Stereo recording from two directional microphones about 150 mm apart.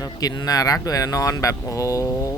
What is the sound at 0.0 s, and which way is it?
Speech, 25° left (ahead or behind).